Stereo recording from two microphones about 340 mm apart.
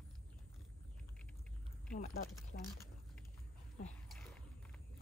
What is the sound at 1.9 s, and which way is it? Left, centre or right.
Speech, left.